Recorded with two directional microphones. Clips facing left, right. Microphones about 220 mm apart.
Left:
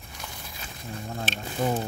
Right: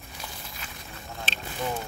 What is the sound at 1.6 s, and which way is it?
Speech, 40° left (ahead or behind).